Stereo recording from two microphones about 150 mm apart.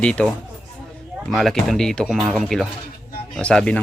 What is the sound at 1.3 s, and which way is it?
Speech, centre (ahead or behind).